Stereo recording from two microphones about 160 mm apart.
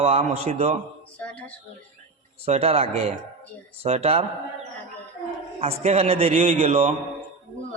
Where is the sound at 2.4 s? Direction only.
40° right (ahead or behind).